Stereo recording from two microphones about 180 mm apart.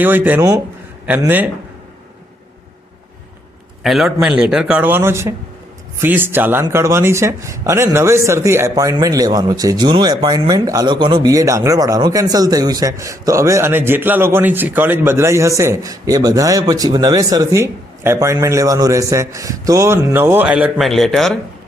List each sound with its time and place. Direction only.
0.0 s speech: 10° right (ahead or behind)
3.8 s speech: centre (ahead or behind)